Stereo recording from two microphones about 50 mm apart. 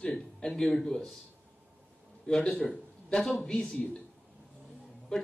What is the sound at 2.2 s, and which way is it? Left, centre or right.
Speech, centre.